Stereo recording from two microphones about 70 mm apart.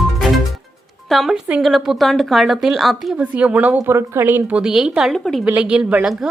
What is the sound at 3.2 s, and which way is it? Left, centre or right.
Speech, centre.